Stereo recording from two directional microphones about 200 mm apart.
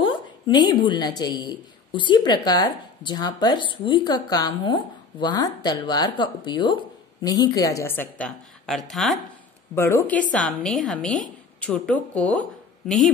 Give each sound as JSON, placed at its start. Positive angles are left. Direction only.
{"t": 0.0, "sound": "a woman's voice", "side_deg": 25}
{"t": 9.8, "sound": "a woman's voice", "side_deg": 15}